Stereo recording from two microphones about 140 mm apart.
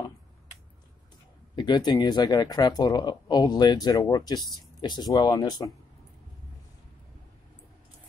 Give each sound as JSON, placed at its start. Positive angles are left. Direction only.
{"t": 1.5, "sound": "speech", "side_deg": 30}